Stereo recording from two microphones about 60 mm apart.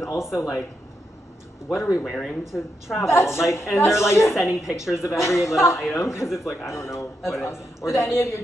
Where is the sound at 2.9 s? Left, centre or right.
Left.